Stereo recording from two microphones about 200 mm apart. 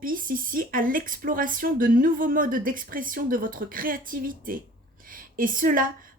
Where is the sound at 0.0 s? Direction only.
45° right (ahead or behind).